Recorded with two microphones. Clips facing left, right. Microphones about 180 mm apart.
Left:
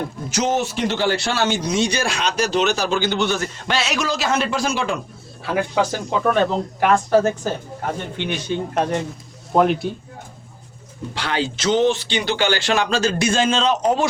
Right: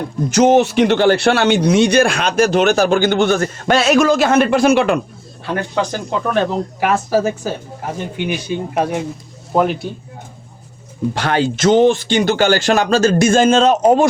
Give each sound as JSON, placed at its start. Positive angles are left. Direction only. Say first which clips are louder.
{"t": 0.3, "sound": "speech", "louder": "right 10 dB", "side_deg": -55}
{"t": 5.5, "sound": "speech", "louder": "right 1 dB", "side_deg": 5}
{"t": 11.1, "sound": "speech", "louder": "right 5 dB", "side_deg": -50}